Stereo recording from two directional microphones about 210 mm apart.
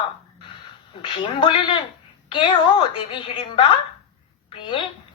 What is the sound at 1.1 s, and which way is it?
Speech, 25° left (ahead or behind).